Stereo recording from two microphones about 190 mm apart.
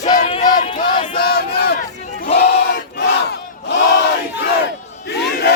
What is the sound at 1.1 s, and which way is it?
Battle cry, 55° left (ahead or behind).